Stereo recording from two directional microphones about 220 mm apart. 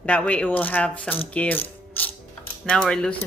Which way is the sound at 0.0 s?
5° left (ahead or behind).